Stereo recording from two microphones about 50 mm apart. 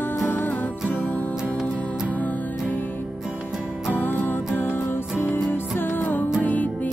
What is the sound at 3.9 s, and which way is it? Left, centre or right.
Music, left.